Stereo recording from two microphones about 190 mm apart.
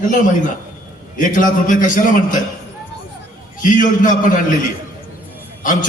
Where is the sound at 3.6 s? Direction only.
45° left (ahead or behind).